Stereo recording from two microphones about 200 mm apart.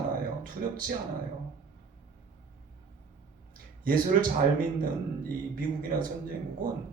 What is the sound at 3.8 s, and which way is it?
A man's voice, 45° right (ahead or behind).